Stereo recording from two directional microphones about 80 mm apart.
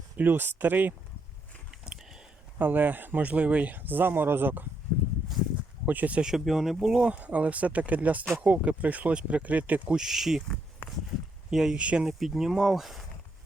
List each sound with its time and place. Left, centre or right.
0.2 s speech: right
1.7 s a sound: centre
2.6 s speech: right
5.8 s speech: centre
9.9 s speech: centre
11.5 s speech: centre
11.8 s speech: centre
12.0 s speech: centre